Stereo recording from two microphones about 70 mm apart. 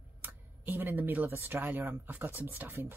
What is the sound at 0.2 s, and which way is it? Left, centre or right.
Speech, right.